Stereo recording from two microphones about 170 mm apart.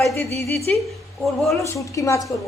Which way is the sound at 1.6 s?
15° left (ahead or behind).